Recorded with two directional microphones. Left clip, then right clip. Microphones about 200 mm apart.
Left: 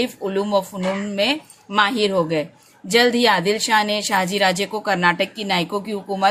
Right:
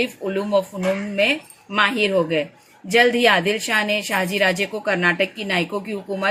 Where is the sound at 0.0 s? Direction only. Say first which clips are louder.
Left 1 dB; 50° left (ahead or behind).